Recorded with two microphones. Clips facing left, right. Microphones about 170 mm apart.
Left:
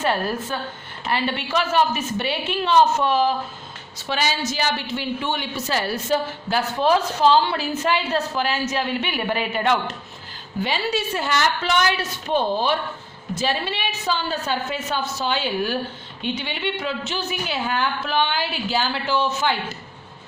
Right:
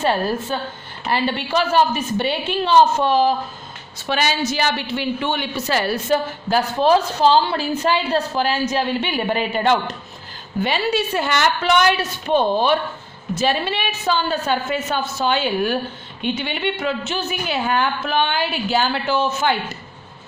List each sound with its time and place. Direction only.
0.0 s a woman's voice: 30° right (ahead or behind)
3.9 s a woman's voice: 60° right (ahead or behind)
6.5 s a woman's voice: 35° right (ahead or behind)
10.6 s a woman's voice: 60° right (ahead or behind)